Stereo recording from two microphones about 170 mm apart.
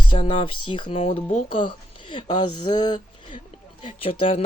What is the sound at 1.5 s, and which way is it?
Speech, 30° left (ahead or behind).